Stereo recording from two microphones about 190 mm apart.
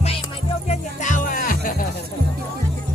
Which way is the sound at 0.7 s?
40° left (ahead or behind).